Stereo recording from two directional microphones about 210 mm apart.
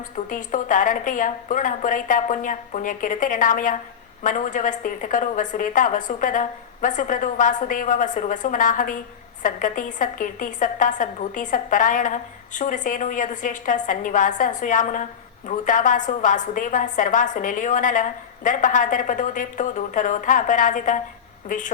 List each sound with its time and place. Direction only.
0.3 s a woman's voice: 40° left (ahead or behind)